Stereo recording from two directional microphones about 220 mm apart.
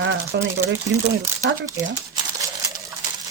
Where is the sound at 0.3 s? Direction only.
50° right (ahead or behind).